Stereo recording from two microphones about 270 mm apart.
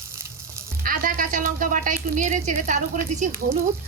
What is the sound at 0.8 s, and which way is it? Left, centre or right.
A woman's voice, right.